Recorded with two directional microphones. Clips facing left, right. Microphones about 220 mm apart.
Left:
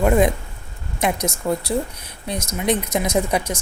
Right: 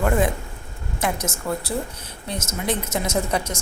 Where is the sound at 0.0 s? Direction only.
20° left (ahead or behind).